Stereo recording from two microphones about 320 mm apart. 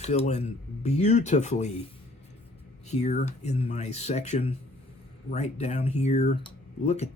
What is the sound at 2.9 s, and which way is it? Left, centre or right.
A man's voice, left.